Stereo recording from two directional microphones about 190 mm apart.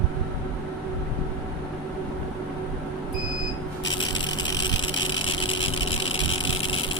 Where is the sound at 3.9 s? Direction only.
25° left (ahead or behind).